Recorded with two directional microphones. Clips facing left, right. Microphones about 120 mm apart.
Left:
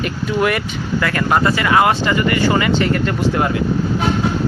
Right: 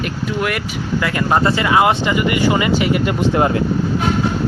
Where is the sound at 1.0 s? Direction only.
20° right (ahead or behind).